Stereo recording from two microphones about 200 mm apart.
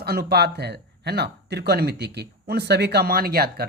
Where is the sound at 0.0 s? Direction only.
50° right (ahead or behind).